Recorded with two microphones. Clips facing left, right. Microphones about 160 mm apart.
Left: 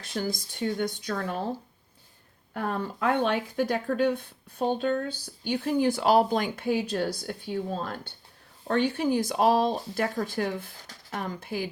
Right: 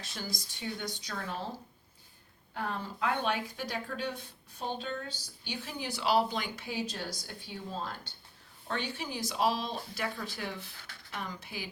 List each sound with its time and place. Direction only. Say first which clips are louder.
0.0 s speech: left 10 dB; 55° left (ahead or behind)
2.5 s a woman's voice: left 6 dB; 55° left (ahead or behind)